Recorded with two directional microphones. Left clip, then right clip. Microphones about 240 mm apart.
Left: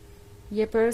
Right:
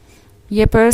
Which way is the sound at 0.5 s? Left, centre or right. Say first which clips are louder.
Right 10 dB; right.